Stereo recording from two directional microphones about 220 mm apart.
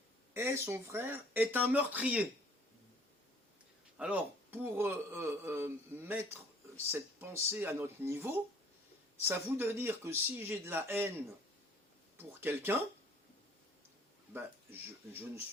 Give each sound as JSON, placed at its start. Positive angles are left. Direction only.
{"t": 0.3, "sound": "speech", "side_deg": -10}
{"t": 3.9, "sound": "speech", "side_deg": -5}
{"t": 12.1, "sound": "speech", "side_deg": -10}
{"t": 14.3, "sound": "speech", "side_deg": -10}